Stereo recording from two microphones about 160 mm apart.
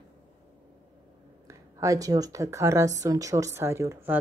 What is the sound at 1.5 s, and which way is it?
Speech, 20° right (ahead or behind).